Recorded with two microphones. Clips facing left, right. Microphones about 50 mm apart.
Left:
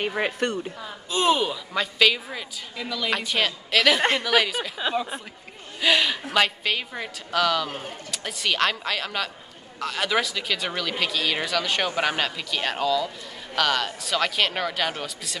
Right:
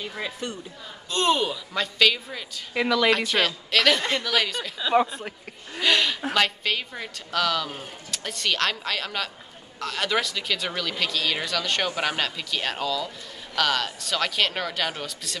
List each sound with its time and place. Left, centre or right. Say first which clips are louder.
0.2 s speech: left 6 dB; left
1.1 s speech: left 1 dB; centre
2.7 s speech: right 9 dB; right
3.1 s speech: right 3 dB; centre
5.8 s speech: left 1 dB; centre